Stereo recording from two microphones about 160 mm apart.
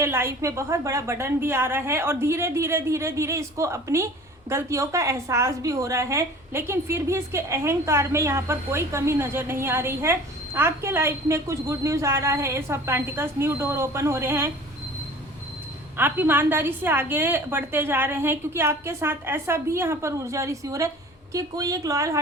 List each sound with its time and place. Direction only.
0.0 s a woman's voice: 15° right (ahead or behind)
16.0 s a woman's voice: 15° right (ahead or behind)